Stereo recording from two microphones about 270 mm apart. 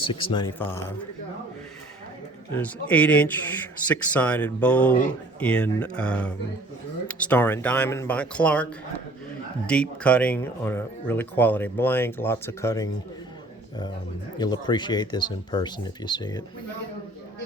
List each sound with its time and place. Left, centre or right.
0.1 s speech: centre
2.6 s speech: centre
9.6 s speech: centre
14.3 s speech: centre